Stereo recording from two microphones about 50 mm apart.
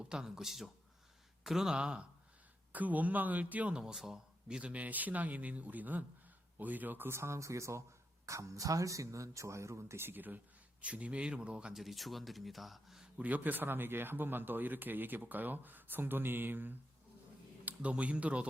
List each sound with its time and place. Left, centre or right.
0.0 s speech: centre
1.8 s speech: right
2.7 s speech: right
3.7 s a man's voice: centre
4.6 s speech: right
7.1 s speech: right
8.3 s speech: right
10.0 s speech: right
10.8 s speech: right
11.7 s speech: centre
13.1 s speech: right
17.7 s speech: right